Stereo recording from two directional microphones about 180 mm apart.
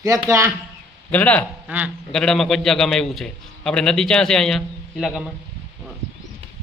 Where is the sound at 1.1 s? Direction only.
10° left (ahead or behind).